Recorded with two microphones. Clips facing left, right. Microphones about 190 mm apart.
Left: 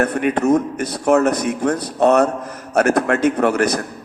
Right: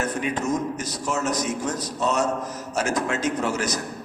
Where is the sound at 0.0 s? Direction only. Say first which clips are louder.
Left 8 dB; 60° left (ahead or behind).